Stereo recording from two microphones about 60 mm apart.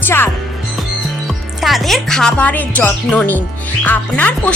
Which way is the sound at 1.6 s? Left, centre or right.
Centre.